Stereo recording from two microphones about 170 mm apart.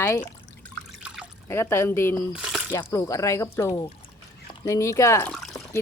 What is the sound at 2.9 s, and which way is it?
A woman's voice, 20° left (ahead or behind).